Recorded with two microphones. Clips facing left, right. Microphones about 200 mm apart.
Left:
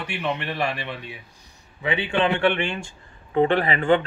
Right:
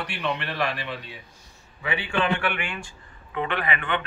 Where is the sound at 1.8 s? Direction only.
25° left (ahead or behind).